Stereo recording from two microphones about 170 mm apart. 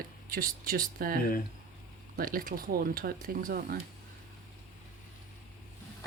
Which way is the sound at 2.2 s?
55° right (ahead or behind).